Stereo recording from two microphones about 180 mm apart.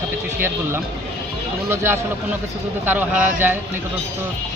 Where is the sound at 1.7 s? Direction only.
15° right (ahead or behind).